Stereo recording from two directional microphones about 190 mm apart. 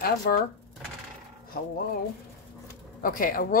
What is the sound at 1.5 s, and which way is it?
Speech, 50° left (ahead or behind).